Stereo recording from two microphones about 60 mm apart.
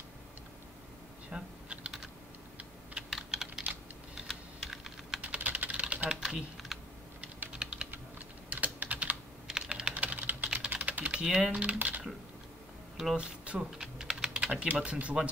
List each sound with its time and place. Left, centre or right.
1.3 s typing: centre
3.1 s computer keyboard: centre
5.2 s typing: right
6.2 s typing: centre
8.5 s typing: right
9.5 s typing: centre
9.9 s typing: right
11.2 s speech: centre
13.1 s typing: centre
14.4 s speech: right